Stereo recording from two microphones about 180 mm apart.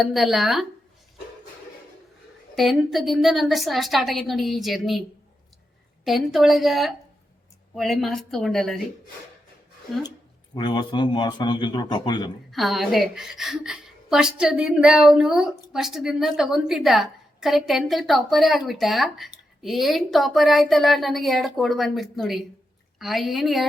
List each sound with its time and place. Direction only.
0.0 s a woman's voice: centre (ahead or behind)
2.6 s a woman's voice: centre (ahead or behind)
6.1 s a woman's voice: centre (ahead or behind)
10.5 s a man's voice: 25° left (ahead or behind)
12.5 s a woman's voice: centre (ahead or behind)